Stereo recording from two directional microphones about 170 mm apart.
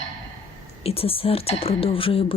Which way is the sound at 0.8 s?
35° left (ahead or behind).